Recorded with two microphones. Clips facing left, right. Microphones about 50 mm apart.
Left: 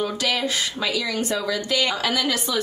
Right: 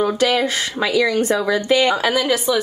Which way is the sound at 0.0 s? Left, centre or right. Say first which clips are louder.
Right 7 dB; right.